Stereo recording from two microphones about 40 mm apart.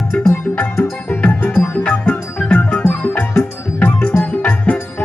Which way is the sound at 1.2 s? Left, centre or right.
Left.